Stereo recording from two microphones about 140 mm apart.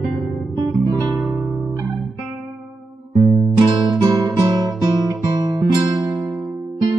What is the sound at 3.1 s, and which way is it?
Music, 20° right (ahead or behind).